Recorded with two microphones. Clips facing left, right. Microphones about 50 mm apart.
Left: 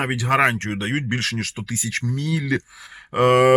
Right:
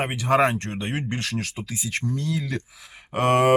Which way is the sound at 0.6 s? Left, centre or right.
Left.